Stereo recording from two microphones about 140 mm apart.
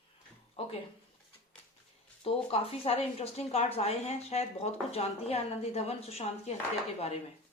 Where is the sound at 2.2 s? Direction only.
45° left (ahead or behind).